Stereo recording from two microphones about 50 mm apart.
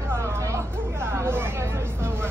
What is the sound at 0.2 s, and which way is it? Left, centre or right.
Hubbub, right.